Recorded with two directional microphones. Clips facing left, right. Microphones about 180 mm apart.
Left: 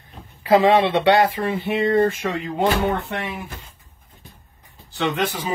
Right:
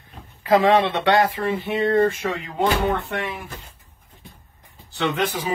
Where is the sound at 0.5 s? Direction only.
10° left (ahead or behind).